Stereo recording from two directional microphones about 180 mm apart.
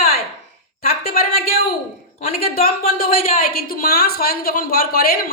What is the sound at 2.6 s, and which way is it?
A woman's voice, 55° left (ahead or behind).